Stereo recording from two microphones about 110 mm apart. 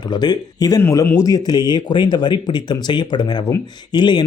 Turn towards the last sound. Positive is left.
turn(degrees=45)  # may be behind; listen again after turning